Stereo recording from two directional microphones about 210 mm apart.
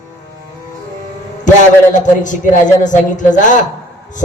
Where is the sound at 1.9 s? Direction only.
35° left (ahead or behind).